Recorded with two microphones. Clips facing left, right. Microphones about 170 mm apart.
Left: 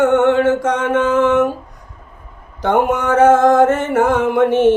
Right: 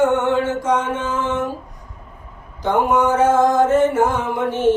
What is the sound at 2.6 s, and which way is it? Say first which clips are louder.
Music: left 1 dB; 65° left (ahead or behind).